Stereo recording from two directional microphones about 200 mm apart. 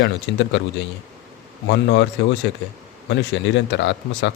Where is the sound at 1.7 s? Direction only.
60° left (ahead or behind).